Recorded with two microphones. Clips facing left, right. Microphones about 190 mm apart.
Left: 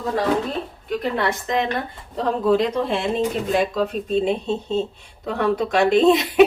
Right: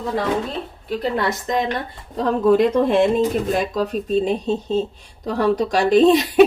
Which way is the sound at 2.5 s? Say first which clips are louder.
Right 5 dB; 50° right (ahead or behind).